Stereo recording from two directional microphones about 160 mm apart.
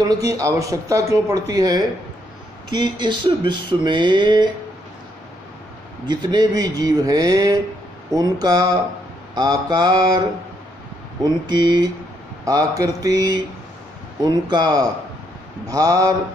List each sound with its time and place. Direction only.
0.0 s speech: 20° right (ahead or behind)
6.0 s speech: 25° right (ahead or behind)
11.2 s speech: 30° right (ahead or behind)